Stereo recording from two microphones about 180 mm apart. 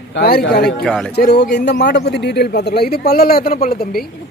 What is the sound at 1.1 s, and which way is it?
A man's voice, 65° left (ahead or behind).